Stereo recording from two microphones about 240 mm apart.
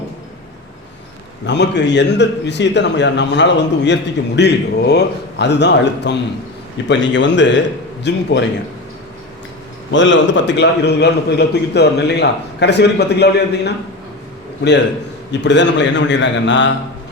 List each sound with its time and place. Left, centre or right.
1.5 s a man's voice: left
9.9 s a man's voice: left
15.3 s a man's voice: left